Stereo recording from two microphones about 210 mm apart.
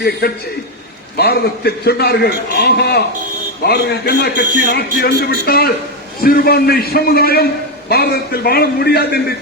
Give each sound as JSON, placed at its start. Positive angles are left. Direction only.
{"t": 1.1, "sound": "a man's voice", "side_deg": 50}